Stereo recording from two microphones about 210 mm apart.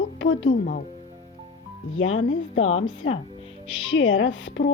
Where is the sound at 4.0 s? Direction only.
70° left (ahead or behind).